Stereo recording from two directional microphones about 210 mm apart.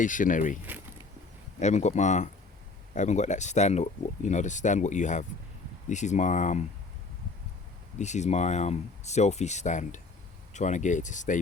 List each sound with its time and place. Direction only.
0.0 s speech: 40° left (ahead or behind)
1.5 s speech: 35° left (ahead or behind)
7.9 s speech: 35° left (ahead or behind)